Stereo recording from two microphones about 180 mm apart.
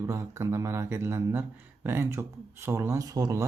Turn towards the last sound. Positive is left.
turn(degrees=-20)  # may be behind; listen again after turning